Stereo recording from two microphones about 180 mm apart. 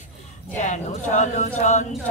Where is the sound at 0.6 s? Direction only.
40° left (ahead or behind).